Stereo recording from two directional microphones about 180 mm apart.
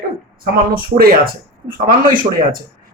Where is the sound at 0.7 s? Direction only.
55° right (ahead or behind).